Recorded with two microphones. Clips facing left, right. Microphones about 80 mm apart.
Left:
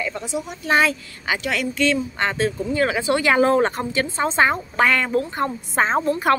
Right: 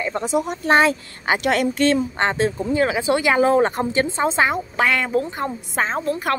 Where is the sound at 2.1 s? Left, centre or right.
Right.